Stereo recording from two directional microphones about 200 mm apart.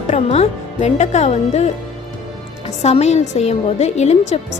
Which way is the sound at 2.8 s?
35° left (ahead or behind).